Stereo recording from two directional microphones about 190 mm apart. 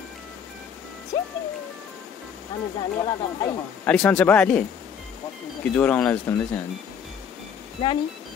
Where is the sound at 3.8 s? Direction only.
5° left (ahead or behind).